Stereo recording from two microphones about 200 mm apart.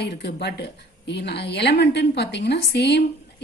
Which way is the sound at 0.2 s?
55° left (ahead or behind).